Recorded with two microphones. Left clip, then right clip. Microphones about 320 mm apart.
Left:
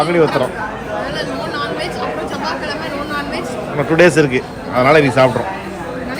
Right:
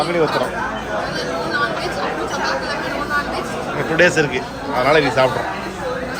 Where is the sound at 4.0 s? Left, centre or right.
Centre.